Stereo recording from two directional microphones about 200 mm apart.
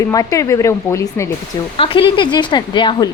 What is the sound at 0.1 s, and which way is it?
Speech, 15° left (ahead or behind).